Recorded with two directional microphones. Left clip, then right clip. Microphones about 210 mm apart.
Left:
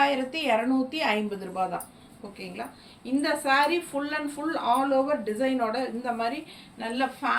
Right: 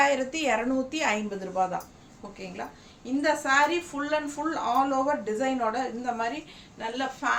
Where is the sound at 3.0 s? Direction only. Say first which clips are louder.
Right 1 dB; 15° right (ahead or behind).